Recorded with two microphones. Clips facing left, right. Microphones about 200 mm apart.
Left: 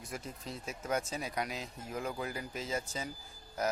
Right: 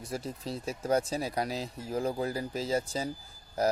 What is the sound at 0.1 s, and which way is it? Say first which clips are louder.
Speech: right 7 dB; 35° right (ahead or behind).